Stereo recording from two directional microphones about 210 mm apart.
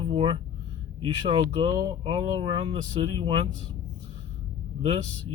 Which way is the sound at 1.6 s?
25° right (ahead or behind).